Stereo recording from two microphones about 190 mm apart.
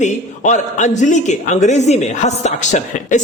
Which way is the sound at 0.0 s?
40° left (ahead or behind).